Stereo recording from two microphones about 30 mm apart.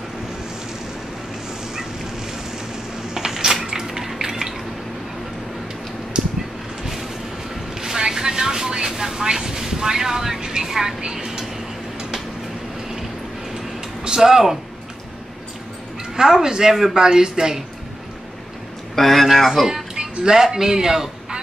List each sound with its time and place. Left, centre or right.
3.3 s a sound: centre
6.2 s a sound: right
7.8 s vehicle: centre
10.6 s a woman's voice: centre
14.0 s speech: centre
16.2 s speech: centre
18.9 s speech: centre
20.0 s speech: right